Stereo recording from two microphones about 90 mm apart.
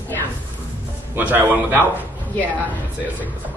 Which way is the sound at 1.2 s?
20° right (ahead or behind).